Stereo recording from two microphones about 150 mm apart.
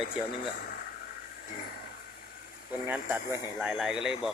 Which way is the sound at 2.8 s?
15° right (ahead or behind).